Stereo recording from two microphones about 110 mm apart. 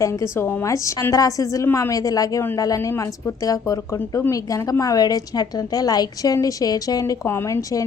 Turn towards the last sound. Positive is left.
turn(degrees=30)  # may be behind; listen again after turning